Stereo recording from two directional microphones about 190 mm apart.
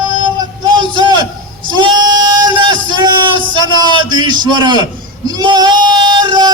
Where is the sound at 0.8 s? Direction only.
25° right (ahead or behind).